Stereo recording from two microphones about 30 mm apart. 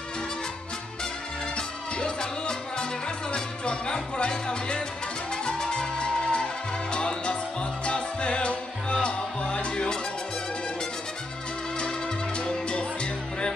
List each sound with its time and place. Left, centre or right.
2.0 s music: left
12.6 s music: left